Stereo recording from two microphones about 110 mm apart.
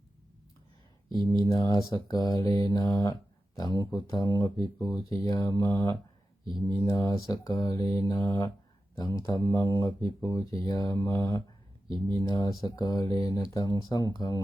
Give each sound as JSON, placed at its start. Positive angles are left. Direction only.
{"t": 1.1, "sound": "speech", "side_deg": -45}
{"t": 1.4, "sound": "speech", "side_deg": 35}